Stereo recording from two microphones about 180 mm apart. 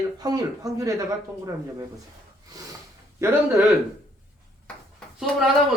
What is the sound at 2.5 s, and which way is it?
Speech, 20° right (ahead or behind).